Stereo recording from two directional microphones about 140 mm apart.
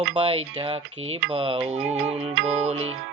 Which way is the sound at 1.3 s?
40° right (ahead or behind).